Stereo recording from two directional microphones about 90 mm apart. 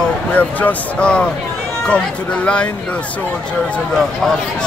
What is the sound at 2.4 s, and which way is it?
Speech, 15° left (ahead or behind).